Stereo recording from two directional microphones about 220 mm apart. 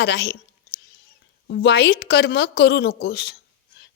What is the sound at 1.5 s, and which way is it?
A woman's voice, 50° left (ahead or behind).